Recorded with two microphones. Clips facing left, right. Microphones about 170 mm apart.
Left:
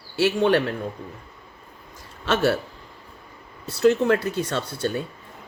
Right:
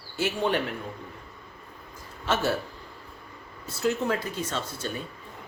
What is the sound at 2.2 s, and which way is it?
Speech, 75° left (ahead or behind).